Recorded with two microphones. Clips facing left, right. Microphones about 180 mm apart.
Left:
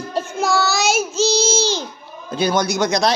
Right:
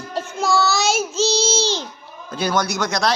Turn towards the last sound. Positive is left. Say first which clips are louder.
# left 4 dB
turn(degrees=20)  # may be behind; listen again after turning